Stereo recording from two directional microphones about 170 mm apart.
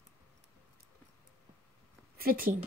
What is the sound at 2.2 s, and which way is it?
Speech, 60° right (ahead or behind).